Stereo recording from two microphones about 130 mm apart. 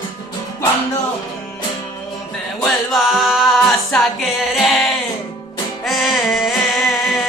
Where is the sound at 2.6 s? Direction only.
Centre (ahead or behind).